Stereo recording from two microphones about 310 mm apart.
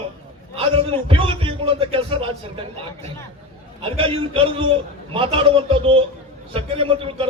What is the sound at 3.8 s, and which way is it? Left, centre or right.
A man's voice, centre.